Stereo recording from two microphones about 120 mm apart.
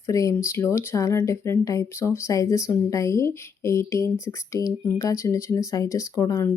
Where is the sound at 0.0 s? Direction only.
25° left (ahead or behind).